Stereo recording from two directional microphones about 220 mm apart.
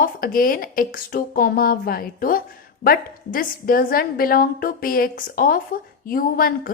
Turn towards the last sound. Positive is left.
turn(degrees=40)  # may be behind; listen again after turning